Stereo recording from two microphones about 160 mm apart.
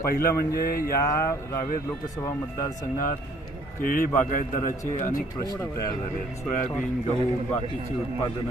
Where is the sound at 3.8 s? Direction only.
60° left (ahead or behind).